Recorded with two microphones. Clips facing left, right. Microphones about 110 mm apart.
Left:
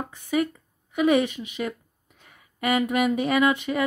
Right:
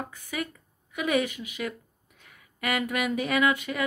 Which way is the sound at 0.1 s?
25° left (ahead or behind).